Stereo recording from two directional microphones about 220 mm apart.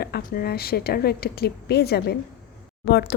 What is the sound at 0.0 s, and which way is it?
Speech, 45° left (ahead or behind).